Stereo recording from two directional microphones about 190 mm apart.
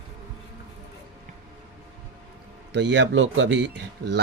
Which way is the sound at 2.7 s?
70° right (ahead or behind).